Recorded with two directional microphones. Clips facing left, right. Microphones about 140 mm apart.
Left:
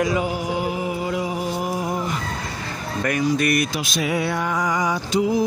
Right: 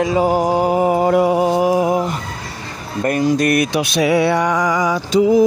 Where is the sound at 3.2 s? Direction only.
50° right (ahead or behind).